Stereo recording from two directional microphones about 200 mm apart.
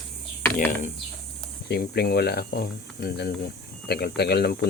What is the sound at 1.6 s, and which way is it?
Speech, 55° left (ahead or behind).